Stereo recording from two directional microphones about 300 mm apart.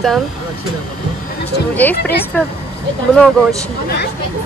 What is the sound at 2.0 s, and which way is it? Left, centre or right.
Speech, left.